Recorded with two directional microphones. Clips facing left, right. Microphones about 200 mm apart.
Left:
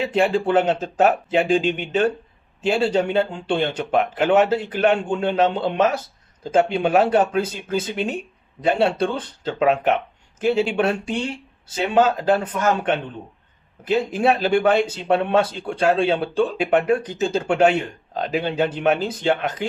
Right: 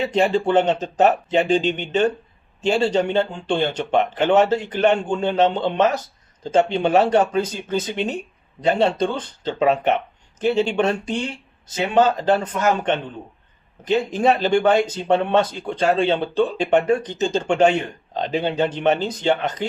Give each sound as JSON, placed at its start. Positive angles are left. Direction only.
{"t": 0.0, "sound": "speech", "side_deg": 5}